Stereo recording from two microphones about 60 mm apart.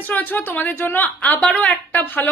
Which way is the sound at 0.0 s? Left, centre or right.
Left.